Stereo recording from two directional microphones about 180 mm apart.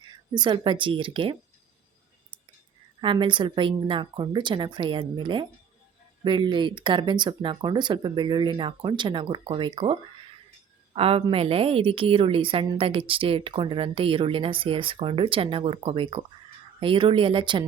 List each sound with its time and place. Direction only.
0.0 s speech: 25° right (ahead or behind)
3.0 s a woman's voice: 25° right (ahead or behind)